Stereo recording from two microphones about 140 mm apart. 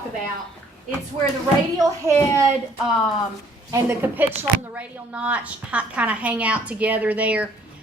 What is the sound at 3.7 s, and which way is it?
A woman's voice, 15° right (ahead or behind).